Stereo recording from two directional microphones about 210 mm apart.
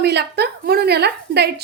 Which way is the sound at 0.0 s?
50° right (ahead or behind).